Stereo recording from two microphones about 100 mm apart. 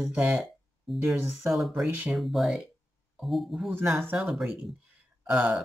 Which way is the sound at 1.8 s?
15° right (ahead or behind).